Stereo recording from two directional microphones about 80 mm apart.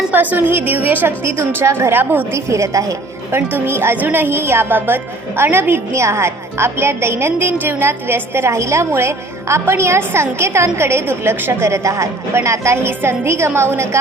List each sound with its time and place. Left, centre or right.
0.1 s a woman's voice: right
2.5 s a woman's voice: right